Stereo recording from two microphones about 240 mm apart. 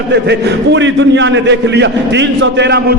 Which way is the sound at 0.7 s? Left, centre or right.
Right.